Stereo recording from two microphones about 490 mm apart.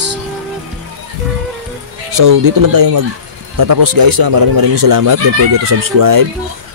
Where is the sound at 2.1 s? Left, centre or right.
Right.